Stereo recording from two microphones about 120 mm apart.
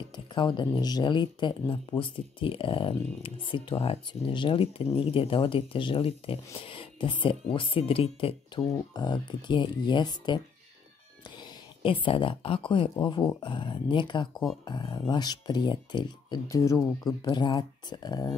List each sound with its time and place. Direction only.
0.3 s speech: 40° left (ahead or behind)
8.5 s speech: 35° left (ahead or behind)
16.4 s speech: 25° left (ahead or behind)